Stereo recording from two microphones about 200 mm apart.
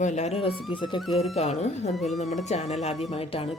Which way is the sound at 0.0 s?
35° left (ahead or behind).